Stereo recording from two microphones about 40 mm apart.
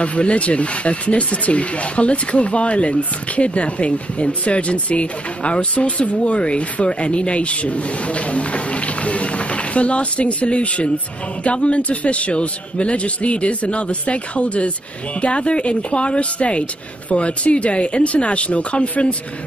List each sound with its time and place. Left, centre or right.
0.0 s speech: left